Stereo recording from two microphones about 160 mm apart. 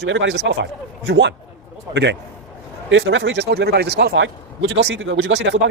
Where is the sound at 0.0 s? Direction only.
90° right.